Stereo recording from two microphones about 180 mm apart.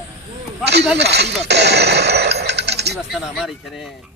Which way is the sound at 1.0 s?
70° right (ahead or behind).